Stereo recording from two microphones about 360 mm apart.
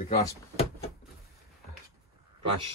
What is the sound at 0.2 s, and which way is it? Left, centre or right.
Speech, centre.